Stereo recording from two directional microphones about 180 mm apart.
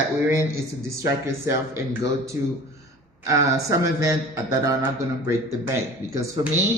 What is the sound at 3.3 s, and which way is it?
A man's voice, 15° right (ahead or behind).